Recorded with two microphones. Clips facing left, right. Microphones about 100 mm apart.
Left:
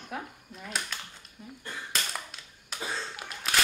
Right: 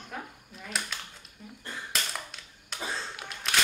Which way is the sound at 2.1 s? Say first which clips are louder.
Even; centre (ahead or behind).